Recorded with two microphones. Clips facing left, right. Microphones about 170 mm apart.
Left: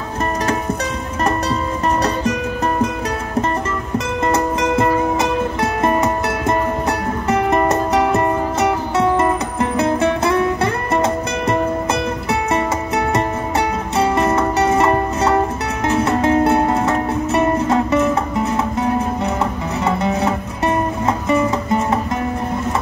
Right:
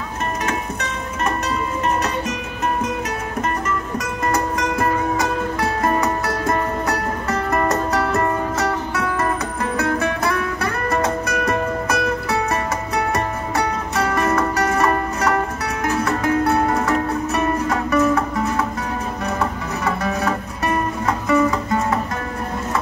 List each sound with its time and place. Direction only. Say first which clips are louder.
4.3 s music: left 4 dB; 25° left (ahead or behind)